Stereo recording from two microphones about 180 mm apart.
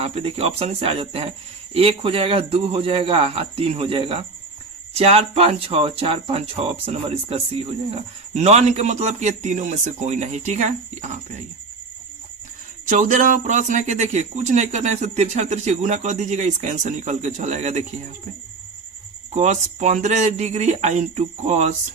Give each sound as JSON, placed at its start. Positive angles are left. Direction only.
{"t": 0.0, "sound": "speech", "side_deg": -35}
{"t": 12.9, "sound": "speech", "side_deg": -45}
{"t": 19.3, "sound": "speech", "side_deg": -40}